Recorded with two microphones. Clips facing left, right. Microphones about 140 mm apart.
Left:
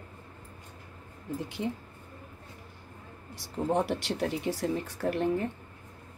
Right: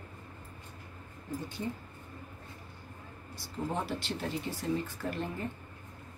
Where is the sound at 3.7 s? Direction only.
80° left.